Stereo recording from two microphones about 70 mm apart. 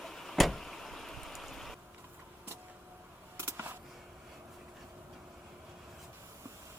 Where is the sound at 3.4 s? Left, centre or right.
Right.